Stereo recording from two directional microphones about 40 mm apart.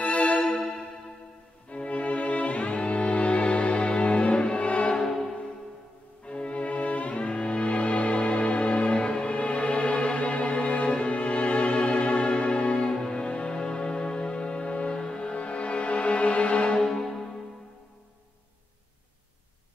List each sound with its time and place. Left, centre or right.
0.0 s music: left
1.7 s music: left
6.2 s music: left
16.8 s music: centre